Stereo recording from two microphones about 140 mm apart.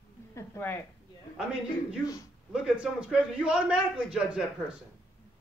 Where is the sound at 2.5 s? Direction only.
5° right (ahead or behind).